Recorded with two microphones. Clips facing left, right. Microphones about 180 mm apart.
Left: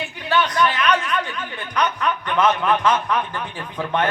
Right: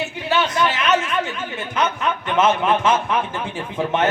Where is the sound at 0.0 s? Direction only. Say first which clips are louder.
Right 1 dB; 25° right (ahead or behind).